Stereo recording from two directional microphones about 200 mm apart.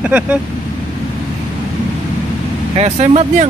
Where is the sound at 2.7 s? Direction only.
30° right (ahead or behind).